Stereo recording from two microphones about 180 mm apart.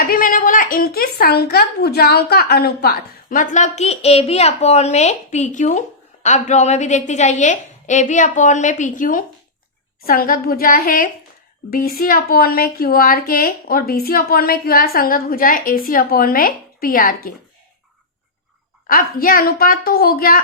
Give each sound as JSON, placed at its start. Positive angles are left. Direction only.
{"t": 0.1, "sound": "a woman's voice", "side_deg": 50}
{"t": 18.9, "sound": "a woman's voice", "side_deg": 55}